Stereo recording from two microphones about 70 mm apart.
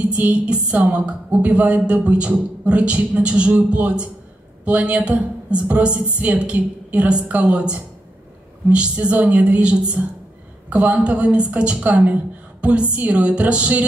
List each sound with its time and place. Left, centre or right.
0.1 s a woman's voice: centre